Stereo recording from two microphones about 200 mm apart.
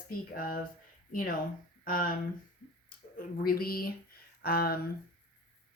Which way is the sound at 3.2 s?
50° left (ahead or behind).